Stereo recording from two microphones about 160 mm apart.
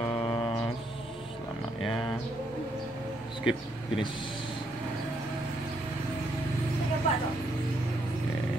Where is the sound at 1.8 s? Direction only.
Centre (ahead or behind).